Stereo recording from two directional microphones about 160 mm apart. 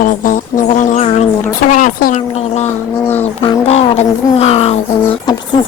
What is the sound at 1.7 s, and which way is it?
Speech, 60° left (ahead or behind).